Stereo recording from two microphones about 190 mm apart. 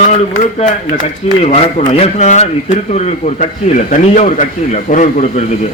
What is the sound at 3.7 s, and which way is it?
A man's voice, 40° left (ahead or behind).